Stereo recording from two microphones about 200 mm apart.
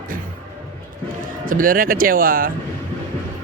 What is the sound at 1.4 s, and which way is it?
Speech, 45° right (ahead or behind).